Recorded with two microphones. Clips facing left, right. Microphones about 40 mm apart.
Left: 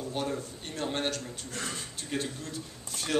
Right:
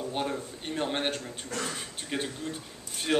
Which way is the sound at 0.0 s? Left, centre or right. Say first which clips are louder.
Right 1 dB; right.